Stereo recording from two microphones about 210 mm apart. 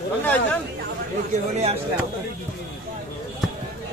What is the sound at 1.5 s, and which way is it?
Speech, 30° right (ahead or behind).